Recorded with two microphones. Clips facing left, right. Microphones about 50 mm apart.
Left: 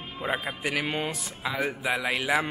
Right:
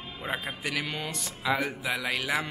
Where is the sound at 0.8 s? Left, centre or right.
Left.